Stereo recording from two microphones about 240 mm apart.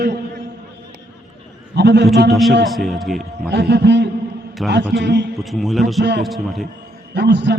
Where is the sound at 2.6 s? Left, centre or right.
Centre.